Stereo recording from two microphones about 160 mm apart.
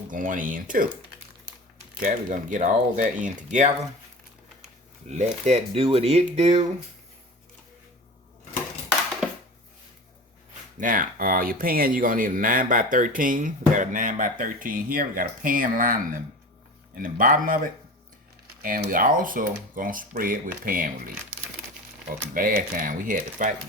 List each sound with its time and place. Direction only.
0.1 s speech: 55° right (ahead or behind)
2.0 s speech: 50° right (ahead or behind)
5.0 s speech: 45° right (ahead or behind)
10.8 s speech: 55° right (ahead or behind)
18.6 s speech: 60° right (ahead or behind)
22.4 s speech: 60° right (ahead or behind)